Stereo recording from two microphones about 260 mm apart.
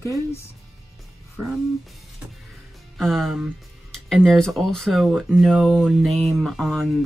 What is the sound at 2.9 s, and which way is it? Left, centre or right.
Speech, centre.